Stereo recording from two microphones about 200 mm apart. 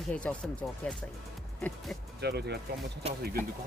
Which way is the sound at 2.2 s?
55° right (ahead or behind).